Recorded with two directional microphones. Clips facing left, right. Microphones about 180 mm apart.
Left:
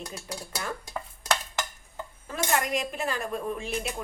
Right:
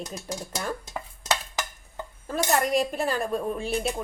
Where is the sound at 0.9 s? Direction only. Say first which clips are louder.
Left 3 dB; 10° right (ahead or behind).